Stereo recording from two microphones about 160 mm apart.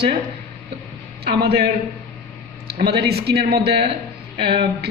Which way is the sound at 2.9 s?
90° right.